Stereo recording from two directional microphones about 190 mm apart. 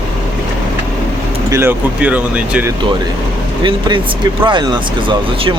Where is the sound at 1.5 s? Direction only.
10° right (ahead or behind).